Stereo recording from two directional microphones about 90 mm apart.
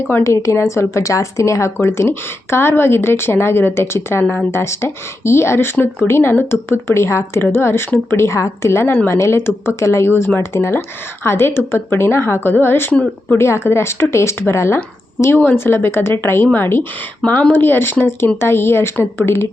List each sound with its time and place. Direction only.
0.1 s speech: 30° left (ahead or behind)